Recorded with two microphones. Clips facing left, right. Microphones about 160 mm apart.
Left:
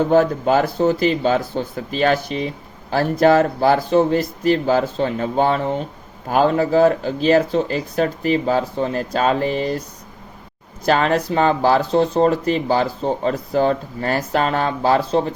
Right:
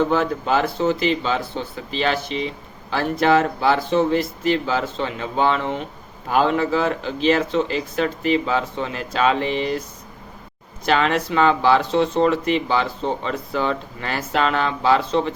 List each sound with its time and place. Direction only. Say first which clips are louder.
0.0 s speech: left 5 dB; 45° left (ahead or behind)
10.8 s speech: left 2 dB; 40° left (ahead or behind)